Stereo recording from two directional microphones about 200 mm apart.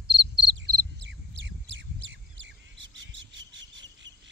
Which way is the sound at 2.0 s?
65° right (ahead or behind).